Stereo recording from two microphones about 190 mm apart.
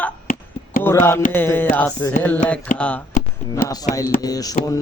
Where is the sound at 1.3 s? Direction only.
10° left (ahead or behind).